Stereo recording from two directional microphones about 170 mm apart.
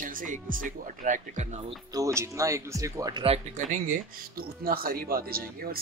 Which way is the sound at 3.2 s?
35° right (ahead or behind).